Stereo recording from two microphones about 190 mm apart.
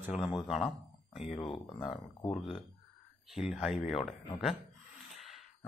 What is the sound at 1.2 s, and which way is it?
Speech, 30° left (ahead or behind).